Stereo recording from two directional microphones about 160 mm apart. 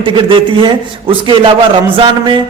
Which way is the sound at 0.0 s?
35° right (ahead or behind).